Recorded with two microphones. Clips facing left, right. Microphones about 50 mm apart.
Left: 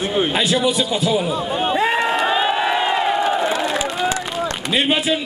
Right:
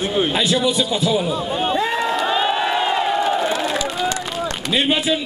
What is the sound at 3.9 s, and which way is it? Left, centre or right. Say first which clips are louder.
Run: left 1 dB; centre.